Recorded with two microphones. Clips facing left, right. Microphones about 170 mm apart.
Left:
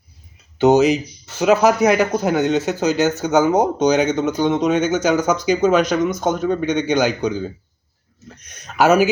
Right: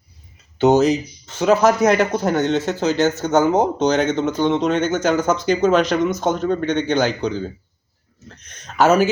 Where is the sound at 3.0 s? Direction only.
Centre (ahead or behind).